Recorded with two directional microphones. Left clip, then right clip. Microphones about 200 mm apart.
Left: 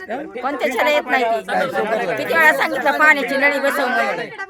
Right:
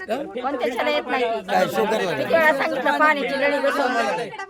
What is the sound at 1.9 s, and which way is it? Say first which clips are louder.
Speech: left 2 dB; 50° right (ahead or behind).